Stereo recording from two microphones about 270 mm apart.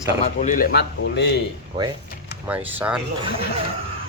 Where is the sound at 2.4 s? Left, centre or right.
Centre.